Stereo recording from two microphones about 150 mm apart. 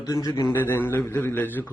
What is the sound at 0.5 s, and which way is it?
A man's voice, 15° left (ahead or behind).